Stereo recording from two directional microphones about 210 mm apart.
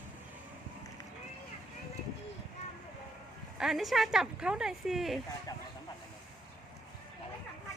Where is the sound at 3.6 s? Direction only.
Centre (ahead or behind).